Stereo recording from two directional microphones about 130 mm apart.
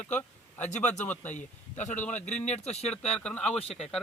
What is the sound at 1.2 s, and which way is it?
Speech, 65° left (ahead or behind).